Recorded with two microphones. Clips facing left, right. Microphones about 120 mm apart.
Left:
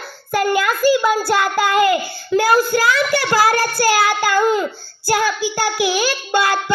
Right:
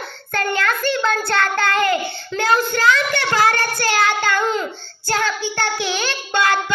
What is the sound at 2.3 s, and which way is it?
Child singing, 10° left (ahead or behind).